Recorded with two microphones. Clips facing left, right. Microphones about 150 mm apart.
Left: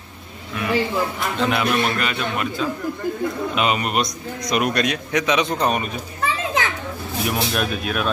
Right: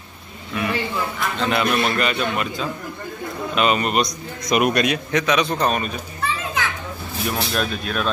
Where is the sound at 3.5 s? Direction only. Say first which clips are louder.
Right 5 dB; 15° left (ahead or behind).